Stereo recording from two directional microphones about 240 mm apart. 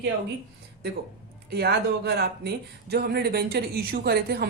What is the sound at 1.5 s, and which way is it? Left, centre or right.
Speech, right.